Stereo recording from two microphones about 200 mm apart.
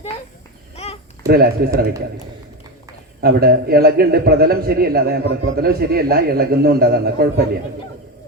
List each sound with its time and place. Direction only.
1.3 s a man's voice: 50° right (ahead or behind)
3.2 s a man's voice: 50° right (ahead or behind)